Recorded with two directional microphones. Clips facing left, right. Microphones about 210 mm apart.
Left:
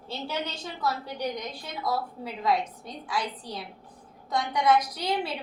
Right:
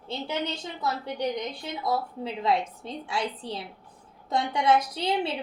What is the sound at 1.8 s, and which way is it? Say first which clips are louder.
A woman's voice: right 1 dB; 25° right (ahead or behind).